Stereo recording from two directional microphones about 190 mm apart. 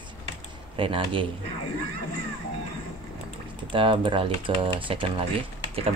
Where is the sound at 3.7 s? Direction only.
25° right (ahead or behind).